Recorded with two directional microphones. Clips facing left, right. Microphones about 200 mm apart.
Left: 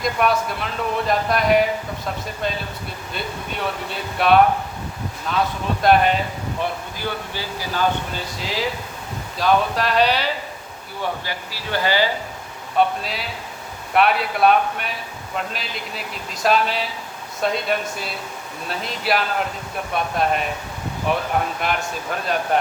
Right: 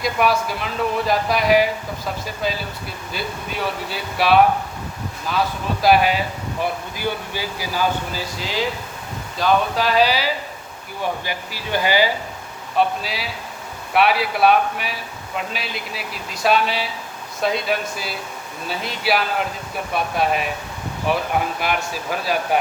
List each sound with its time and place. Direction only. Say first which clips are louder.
0.0 s speech: right 1 dB; 5° right (ahead or behind)
11.3 s speech: right 2 dB; 15° right (ahead or behind)
12.7 s speech: left 1 dB; centre (ahead or behind)